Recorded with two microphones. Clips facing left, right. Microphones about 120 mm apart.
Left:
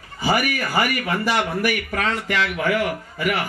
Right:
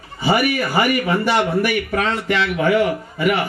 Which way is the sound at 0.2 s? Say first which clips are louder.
Right 4 dB; 25° right (ahead or behind).